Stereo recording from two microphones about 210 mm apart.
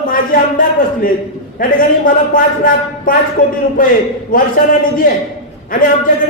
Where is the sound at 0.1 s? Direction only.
40° left (ahead or behind).